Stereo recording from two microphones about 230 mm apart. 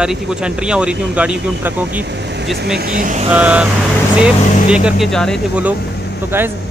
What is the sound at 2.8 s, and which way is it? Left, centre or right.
Speech, right.